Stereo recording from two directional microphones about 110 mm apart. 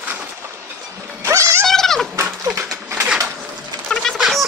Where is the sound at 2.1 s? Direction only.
25° right (ahead or behind).